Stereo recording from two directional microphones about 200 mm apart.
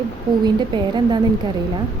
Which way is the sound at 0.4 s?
20° right (ahead or behind).